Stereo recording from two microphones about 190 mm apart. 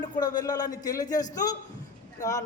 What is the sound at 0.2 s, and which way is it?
A woman's voice, 20° left (ahead or behind).